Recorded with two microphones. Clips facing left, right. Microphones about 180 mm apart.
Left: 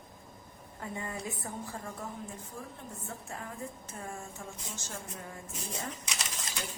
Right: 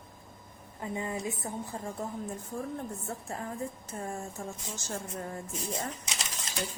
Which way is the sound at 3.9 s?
35° right (ahead or behind).